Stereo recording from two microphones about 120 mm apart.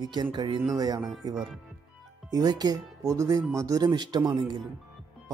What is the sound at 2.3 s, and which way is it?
Speech, 30° right (ahead or behind).